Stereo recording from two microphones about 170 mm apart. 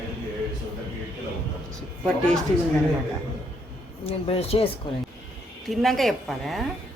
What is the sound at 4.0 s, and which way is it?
Speech, 35° left (ahead or behind).